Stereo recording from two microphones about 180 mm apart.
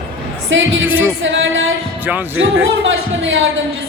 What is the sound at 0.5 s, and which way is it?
A woman's voice, 90° right.